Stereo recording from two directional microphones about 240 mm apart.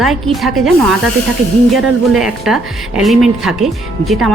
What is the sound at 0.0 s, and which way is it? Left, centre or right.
Speech, centre.